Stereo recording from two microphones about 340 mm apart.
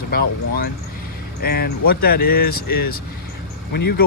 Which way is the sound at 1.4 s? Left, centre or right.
Left.